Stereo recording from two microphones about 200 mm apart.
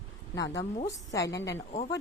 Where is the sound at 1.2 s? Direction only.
15° left (ahead or behind).